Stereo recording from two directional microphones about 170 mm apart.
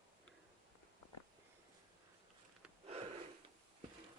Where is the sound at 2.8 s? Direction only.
35° right (ahead or behind).